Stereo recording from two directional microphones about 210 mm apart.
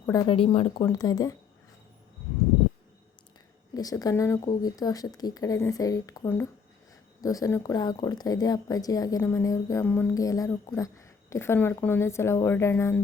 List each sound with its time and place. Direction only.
0.0 s speech: 15° left (ahead or behind)
3.8 s speech: 15° left (ahead or behind)